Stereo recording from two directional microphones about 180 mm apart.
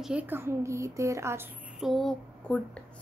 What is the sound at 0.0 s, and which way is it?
A woman's voice, 5° right (ahead or behind).